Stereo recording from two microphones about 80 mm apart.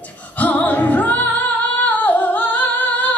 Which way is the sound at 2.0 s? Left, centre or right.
Centre.